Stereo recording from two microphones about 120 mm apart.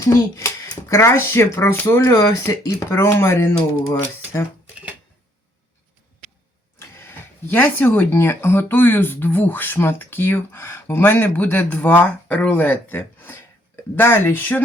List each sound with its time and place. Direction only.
0.0 s speech: 25° left (ahead or behind)
6.7 s speech: 20° left (ahead or behind)